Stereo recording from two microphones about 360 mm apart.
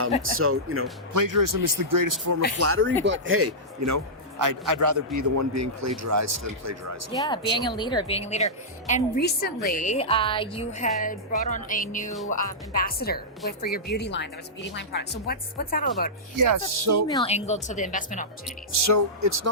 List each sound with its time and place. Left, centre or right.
0.2 s speech: right
1.1 s a man's voice: right
2.6 s a man's voice: right
7.1 s a woman's voice: centre
16.4 s a man's voice: right
17.1 s speech: centre
18.9 s a man's voice: right